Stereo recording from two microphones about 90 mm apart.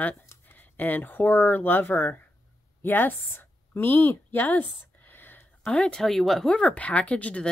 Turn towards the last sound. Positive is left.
turn(degrees=15)  # may be behind; listen again after turning